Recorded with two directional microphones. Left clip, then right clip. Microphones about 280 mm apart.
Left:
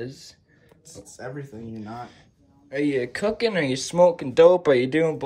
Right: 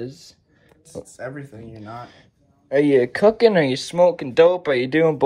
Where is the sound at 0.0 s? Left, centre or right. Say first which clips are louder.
Right 2 dB; centre.